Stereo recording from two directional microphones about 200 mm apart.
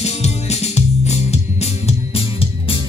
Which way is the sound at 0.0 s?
30° left (ahead or behind).